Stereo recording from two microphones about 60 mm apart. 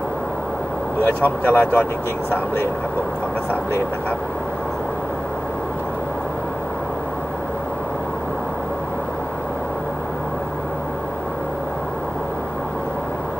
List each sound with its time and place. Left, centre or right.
1.0 s speech: left